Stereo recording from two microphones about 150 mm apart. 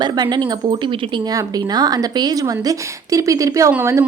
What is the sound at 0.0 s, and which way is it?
A woman's voice, 30° right (ahead or behind).